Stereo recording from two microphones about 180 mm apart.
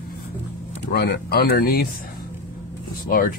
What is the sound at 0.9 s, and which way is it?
Speech, 60° left (ahead or behind).